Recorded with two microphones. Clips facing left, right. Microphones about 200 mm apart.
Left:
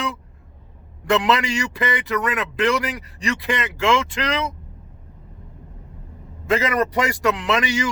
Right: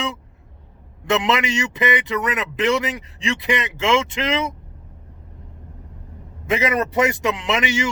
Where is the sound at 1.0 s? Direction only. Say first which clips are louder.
Left 1 dB; 20° right (ahead or behind).